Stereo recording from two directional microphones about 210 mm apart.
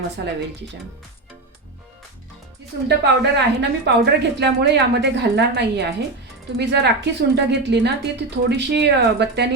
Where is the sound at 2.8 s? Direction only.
55° right (ahead or behind).